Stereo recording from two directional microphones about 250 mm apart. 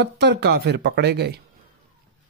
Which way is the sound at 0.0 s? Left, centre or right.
Right.